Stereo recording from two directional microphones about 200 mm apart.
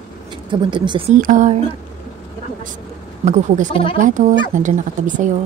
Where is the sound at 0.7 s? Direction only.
25° right (ahead or behind).